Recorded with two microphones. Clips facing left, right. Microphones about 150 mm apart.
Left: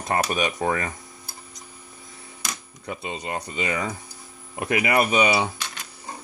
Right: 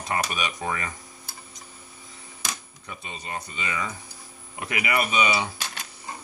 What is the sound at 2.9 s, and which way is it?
Speech, 30° left (ahead or behind).